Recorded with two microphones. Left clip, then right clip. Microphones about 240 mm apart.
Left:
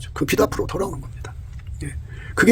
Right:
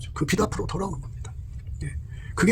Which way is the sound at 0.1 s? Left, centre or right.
Left.